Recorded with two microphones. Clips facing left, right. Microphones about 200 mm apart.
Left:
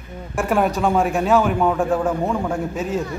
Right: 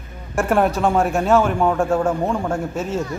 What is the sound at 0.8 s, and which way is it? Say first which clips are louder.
A man's voice: even; centre (ahead or behind).